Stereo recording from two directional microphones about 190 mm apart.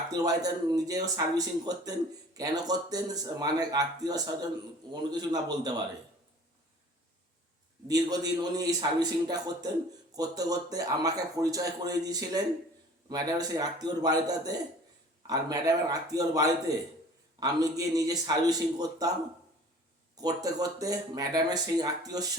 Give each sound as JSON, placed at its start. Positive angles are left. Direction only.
{"t": 0.1, "sound": "speech", "side_deg": -20}
{"t": 7.9, "sound": "speech", "side_deg": -20}
{"t": 20.2, "sound": "speech", "side_deg": -20}